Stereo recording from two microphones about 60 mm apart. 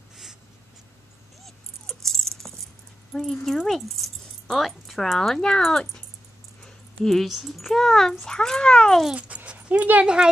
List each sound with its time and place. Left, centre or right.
1.4 s dog: centre
3.4 s speech: centre
7.2 s speech: centre
9.1 s dog: right
10.0 s speech: centre